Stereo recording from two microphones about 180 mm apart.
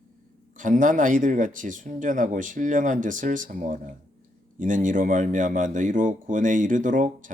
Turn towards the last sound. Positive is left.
turn(degrees=-45)  # may be behind; listen again after turning